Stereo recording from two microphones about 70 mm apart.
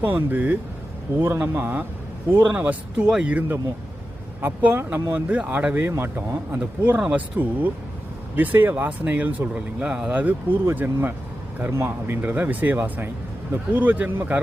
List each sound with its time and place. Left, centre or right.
0.0 s speech: right
5.1 s speech: right
6.6 s speech: right